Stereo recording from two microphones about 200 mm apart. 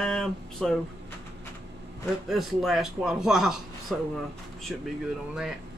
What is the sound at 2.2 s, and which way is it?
Speech, centre (ahead or behind).